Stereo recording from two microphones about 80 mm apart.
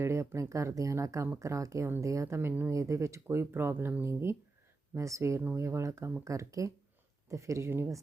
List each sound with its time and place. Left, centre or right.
0.0 s speech: right
2.7 s speech: right